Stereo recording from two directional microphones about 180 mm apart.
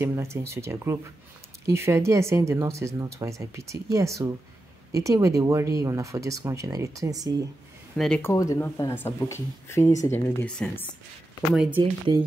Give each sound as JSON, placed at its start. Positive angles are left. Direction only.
{"t": 0.0, "sound": "speech", "side_deg": -15}
{"t": 8.0, "sound": "speech", "side_deg": 5}
{"t": 8.3, "sound": "speech", "side_deg": 15}
{"t": 11.5, "sound": "speech", "side_deg": -5}